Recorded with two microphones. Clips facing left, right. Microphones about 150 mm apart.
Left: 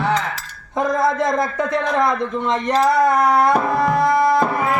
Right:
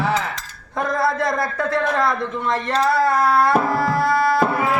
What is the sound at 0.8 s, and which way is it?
Speech, 20° left (ahead or behind).